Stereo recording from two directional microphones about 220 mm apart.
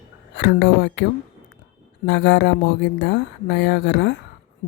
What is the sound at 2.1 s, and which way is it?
Speech, 50° left (ahead or behind).